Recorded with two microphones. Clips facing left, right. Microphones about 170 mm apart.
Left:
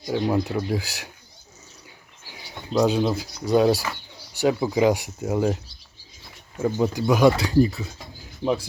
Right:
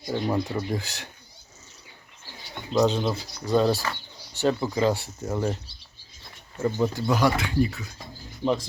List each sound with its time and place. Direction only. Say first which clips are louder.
0.1 s speech: left 3 dB; 10° left (ahead or behind)
2.7 s speech: left 2 dB; 10° left (ahead or behind)
6.7 s speech: left 4 dB; 15° left (ahead or behind)
7.3 s speech: left 5 dB; 35° left (ahead or behind)